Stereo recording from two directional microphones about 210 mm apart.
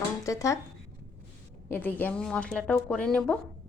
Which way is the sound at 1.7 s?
10° left (ahead or behind).